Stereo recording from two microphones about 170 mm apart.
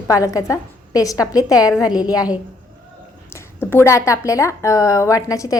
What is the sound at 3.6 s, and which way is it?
A woman's voice, 15° left (ahead or behind).